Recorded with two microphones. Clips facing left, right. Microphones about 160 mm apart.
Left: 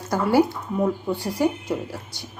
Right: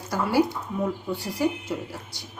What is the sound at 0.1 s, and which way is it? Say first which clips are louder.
Speech: left 4 dB; 55° left (ahead or behind).